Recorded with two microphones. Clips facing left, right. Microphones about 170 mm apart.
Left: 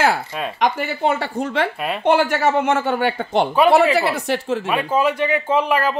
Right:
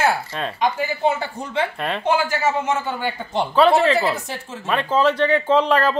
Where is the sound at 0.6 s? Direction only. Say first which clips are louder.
Left 1 dB; 70° left (ahead or behind).